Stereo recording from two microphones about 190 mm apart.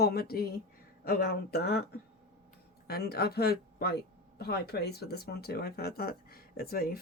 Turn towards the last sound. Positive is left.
turn(degrees=50)  # may be behind; listen again after turning